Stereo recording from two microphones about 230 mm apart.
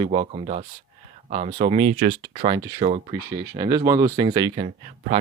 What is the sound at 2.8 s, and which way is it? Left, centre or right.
Speech, right.